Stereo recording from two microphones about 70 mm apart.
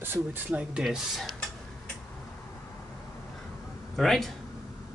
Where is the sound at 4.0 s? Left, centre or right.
Centre.